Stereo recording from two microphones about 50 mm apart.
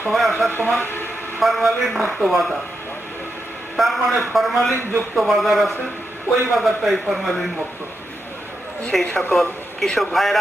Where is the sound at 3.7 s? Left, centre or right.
Centre.